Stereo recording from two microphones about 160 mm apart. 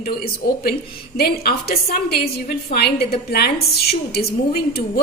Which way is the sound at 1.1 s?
70° left (ahead or behind).